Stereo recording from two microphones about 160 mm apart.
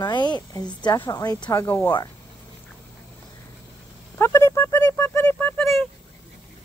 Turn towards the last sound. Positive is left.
turn(degrees=10)  # may be behind; listen again after turning